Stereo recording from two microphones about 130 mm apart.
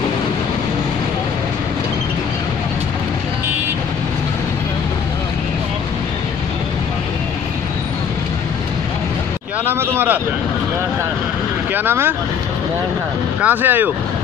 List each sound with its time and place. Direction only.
9.7 s speech: 15° right (ahead or behind)
11.7 s speech: 15° right (ahead or behind)
13.4 s speech: 15° right (ahead or behind)